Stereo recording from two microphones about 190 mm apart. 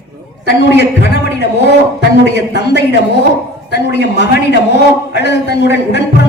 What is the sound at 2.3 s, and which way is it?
A man's voice, 60° left (ahead or behind).